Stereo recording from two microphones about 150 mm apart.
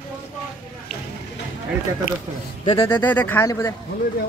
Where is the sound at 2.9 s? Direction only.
10° left (ahead or behind).